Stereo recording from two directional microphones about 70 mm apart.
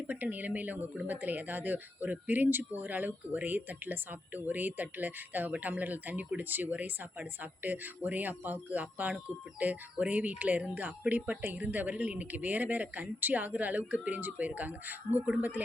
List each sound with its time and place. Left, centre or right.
0.1 s speech: right